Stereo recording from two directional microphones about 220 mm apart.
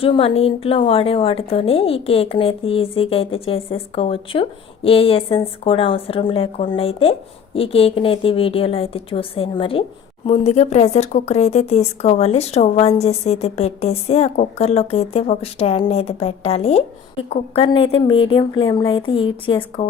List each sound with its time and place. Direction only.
0.0 s a woman's voice: 25° left (ahead or behind)